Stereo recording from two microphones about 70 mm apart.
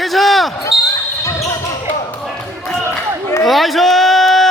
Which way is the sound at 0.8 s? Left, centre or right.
Left.